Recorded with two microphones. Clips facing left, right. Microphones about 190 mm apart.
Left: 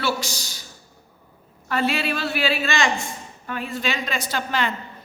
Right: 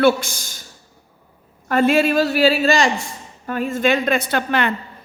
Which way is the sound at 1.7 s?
50° right (ahead or behind).